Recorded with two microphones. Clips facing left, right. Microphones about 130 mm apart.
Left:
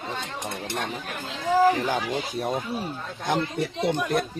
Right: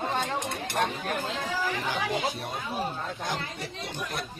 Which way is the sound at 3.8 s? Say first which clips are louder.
Left 12 dB; 55° left (ahead or behind).